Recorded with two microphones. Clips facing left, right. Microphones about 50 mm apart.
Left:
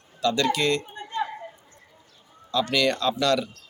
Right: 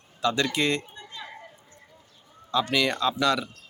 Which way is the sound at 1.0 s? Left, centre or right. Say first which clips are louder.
Left 12 dB; left.